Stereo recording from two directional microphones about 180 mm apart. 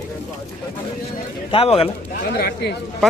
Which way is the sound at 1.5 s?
30° left (ahead or behind).